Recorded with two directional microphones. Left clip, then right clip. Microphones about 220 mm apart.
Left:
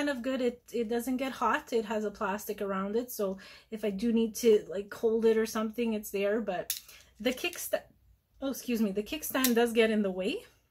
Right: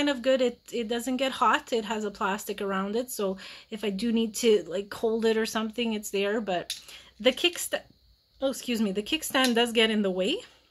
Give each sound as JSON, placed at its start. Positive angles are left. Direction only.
{"t": 0.0, "sound": "speech", "side_deg": -40}